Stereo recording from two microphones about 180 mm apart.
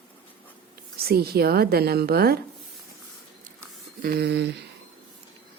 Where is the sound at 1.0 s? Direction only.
60° right (ahead or behind).